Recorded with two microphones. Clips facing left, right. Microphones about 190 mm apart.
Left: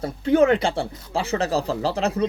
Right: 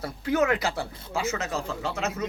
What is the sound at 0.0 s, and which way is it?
Speech, 30° left (ahead or behind).